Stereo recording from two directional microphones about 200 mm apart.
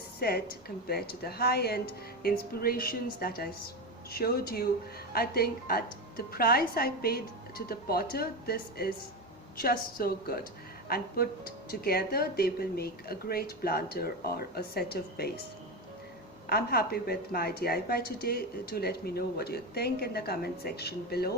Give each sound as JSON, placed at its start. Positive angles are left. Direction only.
{"t": 0.2, "sound": "a woman's voice", "side_deg": 50}
{"t": 16.5, "sound": "a woman's voice", "side_deg": 50}